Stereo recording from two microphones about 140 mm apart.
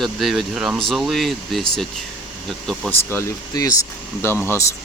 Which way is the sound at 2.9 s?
15° left (ahead or behind).